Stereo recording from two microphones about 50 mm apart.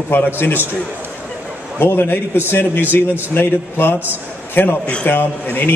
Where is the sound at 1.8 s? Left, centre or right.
Left.